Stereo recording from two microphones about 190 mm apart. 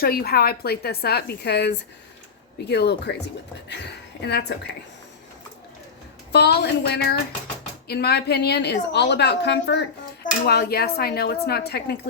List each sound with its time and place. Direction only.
0.0 s a woman's voice: 50° left (ahead or behind)
6.3 s a woman's voice: 60° left (ahead or behind)